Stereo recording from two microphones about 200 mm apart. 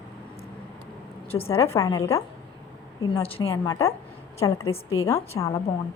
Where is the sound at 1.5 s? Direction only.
15° left (ahead or behind).